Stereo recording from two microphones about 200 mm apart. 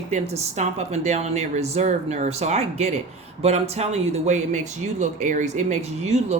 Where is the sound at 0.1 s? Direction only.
35° right (ahead or behind).